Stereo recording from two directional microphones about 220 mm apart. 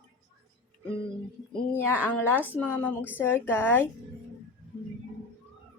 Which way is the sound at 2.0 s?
10° left (ahead or behind).